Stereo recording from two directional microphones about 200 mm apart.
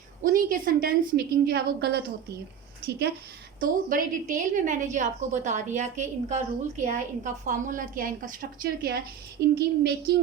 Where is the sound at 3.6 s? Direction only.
45° right (ahead or behind).